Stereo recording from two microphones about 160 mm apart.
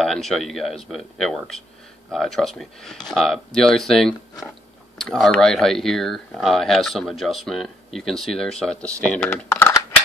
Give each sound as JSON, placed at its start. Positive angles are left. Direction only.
{"t": 0.0, "sound": "speech", "side_deg": 5}